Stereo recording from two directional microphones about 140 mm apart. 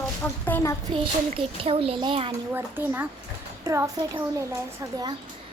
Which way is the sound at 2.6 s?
15° right (ahead or behind).